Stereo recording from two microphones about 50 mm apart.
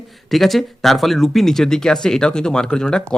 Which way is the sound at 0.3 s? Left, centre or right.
Centre.